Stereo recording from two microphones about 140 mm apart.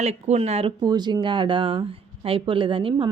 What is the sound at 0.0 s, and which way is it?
Speech, 50° right (ahead or behind).